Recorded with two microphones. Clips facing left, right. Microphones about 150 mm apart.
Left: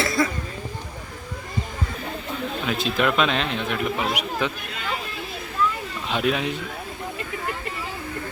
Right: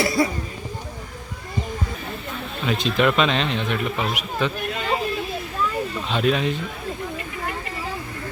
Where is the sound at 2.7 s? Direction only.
5° left (ahead or behind).